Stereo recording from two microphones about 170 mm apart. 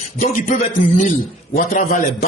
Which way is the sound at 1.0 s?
50° left (ahead or behind).